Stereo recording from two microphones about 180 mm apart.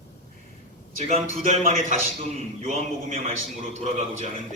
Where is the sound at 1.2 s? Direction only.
40° left (ahead or behind).